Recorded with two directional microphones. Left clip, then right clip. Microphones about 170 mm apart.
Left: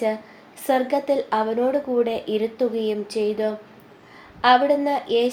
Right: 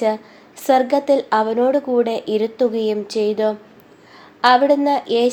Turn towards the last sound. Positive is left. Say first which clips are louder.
# right 4 dB
turn(degrees=-30)  # may be behind; listen again after turning